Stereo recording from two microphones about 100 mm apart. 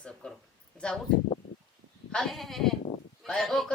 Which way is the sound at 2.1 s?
5° left (ahead or behind).